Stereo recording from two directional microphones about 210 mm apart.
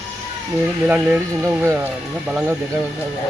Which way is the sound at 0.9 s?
5° right (ahead or behind).